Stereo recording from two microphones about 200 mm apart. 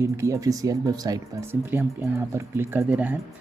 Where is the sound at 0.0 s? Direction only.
15° right (ahead or behind).